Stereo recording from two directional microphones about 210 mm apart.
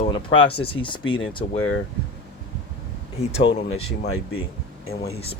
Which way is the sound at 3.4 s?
65° left (ahead or behind).